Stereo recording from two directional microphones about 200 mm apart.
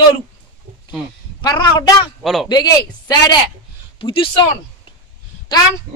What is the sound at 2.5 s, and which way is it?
A man's voice, 20° left (ahead or behind).